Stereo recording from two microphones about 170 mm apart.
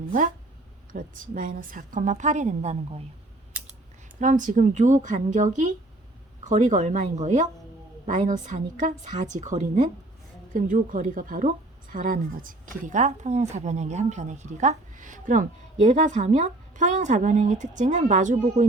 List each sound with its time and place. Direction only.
0.9 s speech: 50° right (ahead or behind)
4.2 s speech: 50° right (ahead or behind)